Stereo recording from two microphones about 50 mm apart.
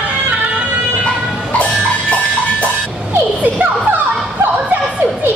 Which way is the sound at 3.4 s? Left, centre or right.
Right.